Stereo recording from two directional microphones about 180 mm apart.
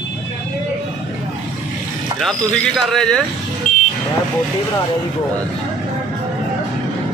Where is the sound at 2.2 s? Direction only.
Centre (ahead or behind).